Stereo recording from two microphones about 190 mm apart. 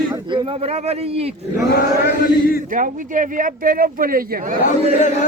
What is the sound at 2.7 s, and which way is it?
Speech, 45° right (ahead or behind).